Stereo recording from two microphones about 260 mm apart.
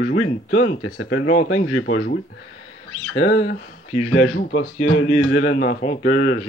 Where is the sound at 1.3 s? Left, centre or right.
Left.